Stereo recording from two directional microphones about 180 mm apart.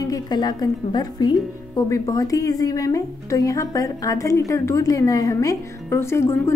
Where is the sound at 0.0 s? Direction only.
20° left (ahead or behind).